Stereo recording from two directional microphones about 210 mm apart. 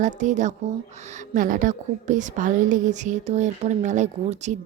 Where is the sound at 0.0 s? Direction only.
35° right (ahead or behind).